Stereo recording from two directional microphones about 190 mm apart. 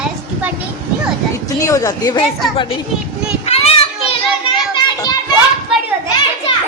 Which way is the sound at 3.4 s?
30° left (ahead or behind).